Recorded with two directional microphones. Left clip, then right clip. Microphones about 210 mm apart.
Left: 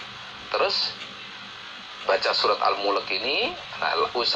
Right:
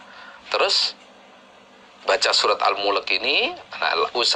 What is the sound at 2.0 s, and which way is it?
Speech, 35° right (ahead or behind).